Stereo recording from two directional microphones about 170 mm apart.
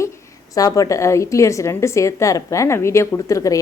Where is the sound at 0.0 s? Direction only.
20° left (ahead or behind).